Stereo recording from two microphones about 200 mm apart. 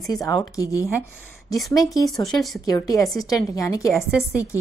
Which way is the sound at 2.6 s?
20° left (ahead or behind).